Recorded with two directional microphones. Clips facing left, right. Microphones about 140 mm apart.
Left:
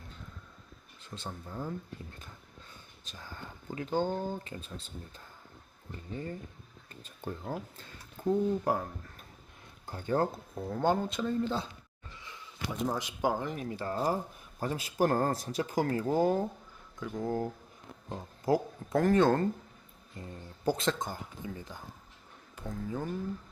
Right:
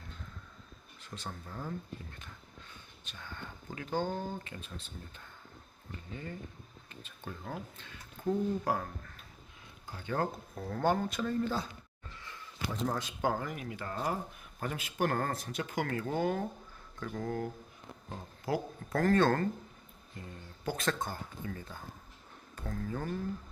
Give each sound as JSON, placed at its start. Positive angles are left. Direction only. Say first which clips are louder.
{"t": 1.3, "sound": "speech", "louder": "left 3 dB", "side_deg": 15}
{"t": 3.0, "sound": "speech", "louder": "even", "side_deg": 35}
{"t": 7.0, "sound": "speech", "louder": "left 5 dB", "side_deg": 35}
{"t": 8.3, "sound": "speech", "louder": "left 3 dB", "side_deg": 20}
{"t": 9.9, "sound": "speech", "louder": "left 6 dB", "side_deg": 40}
{"t": 10.2, "sound": "speech", "louder": "left 3 dB", "side_deg": 20}
{"t": 13.5, "sound": "speech", "louder": "left 5 dB", "side_deg": 35}
{"t": 17.0, "sound": "speech", "louder": "left 2 dB", "side_deg": 10}
{"t": 17.2, "sound": "speech", "louder": "left 4 dB", "side_deg": 30}
{"t": 18.5, "sound": "speech", "louder": "left 6 dB", "side_deg": 45}
{"t": 18.9, "sound": "speech", "louder": "left 2 dB", "side_deg": 20}
{"t": 20.7, "sound": "speech", "louder": "left 2 dB", "side_deg": 20}